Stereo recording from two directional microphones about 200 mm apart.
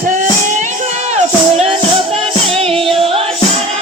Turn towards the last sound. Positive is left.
turn(degrees=-30)  # may be behind; listen again after turning